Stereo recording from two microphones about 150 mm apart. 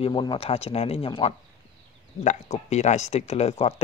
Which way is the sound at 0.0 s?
30° left (ahead or behind).